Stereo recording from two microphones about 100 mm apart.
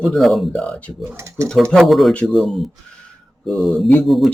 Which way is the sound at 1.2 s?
30° right (ahead or behind).